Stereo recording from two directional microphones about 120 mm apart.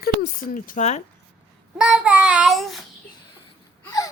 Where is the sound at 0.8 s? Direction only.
75° left (ahead or behind).